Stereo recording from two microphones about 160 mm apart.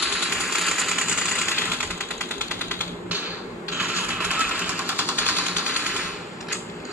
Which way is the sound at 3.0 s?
10° right (ahead or behind).